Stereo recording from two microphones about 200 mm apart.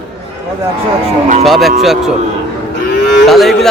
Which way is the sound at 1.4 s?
Centre (ahead or behind).